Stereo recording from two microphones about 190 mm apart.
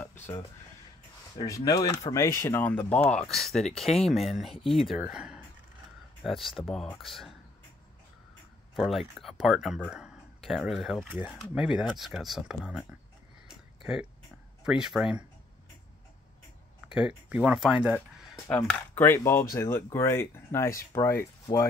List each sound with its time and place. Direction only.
1.4 s speech: 20° left (ahead or behind); by 7.3 s centre (ahead or behind)
8.7 s speech: centre (ahead or behind)
13.5 s a sound: 5° right (ahead or behind)
14.6 s speech: 5° right (ahead or behind)
16.9 s speech: 5° right (ahead or behind)
18.5 s speech: 10° left (ahead or behind)